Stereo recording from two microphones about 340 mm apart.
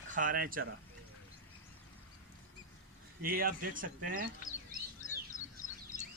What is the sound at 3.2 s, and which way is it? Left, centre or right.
Speech, right.